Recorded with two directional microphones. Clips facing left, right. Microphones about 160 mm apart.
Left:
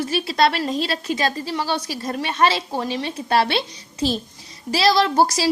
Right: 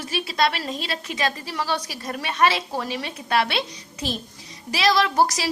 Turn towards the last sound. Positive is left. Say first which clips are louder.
# left 3 dB
turn(degrees=30)  # may be behind; listen again after turning